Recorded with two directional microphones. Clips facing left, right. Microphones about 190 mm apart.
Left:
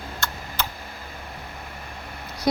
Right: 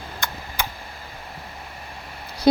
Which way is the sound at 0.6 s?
10° right (ahead or behind).